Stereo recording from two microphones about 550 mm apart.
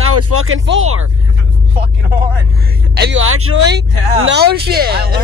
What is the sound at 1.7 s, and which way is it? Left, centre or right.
Music, right.